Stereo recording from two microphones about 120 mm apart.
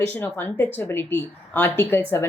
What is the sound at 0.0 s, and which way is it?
Speech, 15° left (ahead or behind).